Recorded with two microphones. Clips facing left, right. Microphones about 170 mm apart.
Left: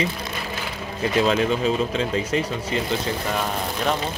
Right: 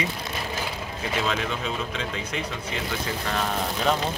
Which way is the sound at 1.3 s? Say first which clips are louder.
Left 8 dB; 35° left (ahead or behind).